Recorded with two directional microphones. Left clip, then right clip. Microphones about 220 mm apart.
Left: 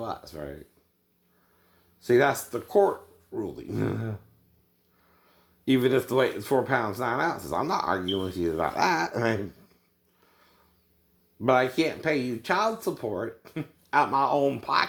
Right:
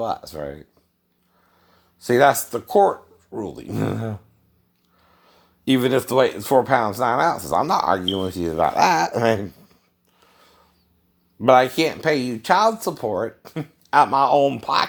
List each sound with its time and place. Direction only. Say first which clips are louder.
0.0 s speech: right 9 dB; 30° right (ahead or behind)
2.0 s speech: right 7 dB; 25° right (ahead or behind)
5.6 s speech: right 4 dB; 30° right (ahead or behind)
10.2 s a sound: right 8 dB; 25° right (ahead or behind)
11.3 s speech: right 8 dB; 30° right (ahead or behind)